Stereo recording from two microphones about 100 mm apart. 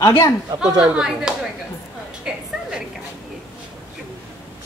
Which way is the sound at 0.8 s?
5° right (ahead or behind).